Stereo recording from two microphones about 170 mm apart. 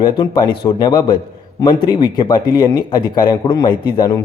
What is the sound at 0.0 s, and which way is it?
A man's voice, 30° left (ahead or behind).